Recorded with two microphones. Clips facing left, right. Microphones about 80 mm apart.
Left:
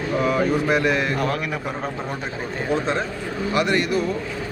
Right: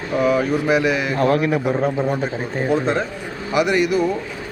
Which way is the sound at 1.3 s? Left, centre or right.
Right.